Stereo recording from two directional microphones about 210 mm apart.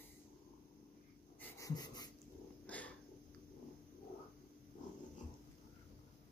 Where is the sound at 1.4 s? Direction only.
15° left (ahead or behind).